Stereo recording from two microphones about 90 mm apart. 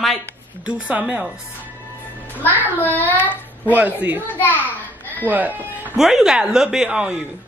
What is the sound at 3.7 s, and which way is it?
Speech, 20° right (ahead or behind).